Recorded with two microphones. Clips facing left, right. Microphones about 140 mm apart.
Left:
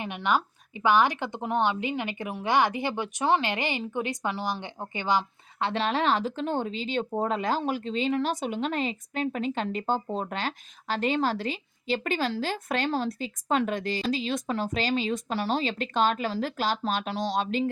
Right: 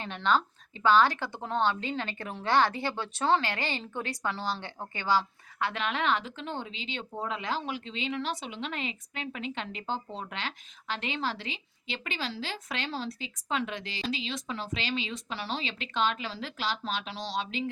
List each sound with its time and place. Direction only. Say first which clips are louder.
0.0 s speech: left 1 dB; 15° left (ahead or behind); by 17.7 s 45° left (ahead or behind)